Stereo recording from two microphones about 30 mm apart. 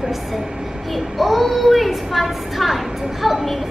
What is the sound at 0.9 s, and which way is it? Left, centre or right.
A woman's voice, centre.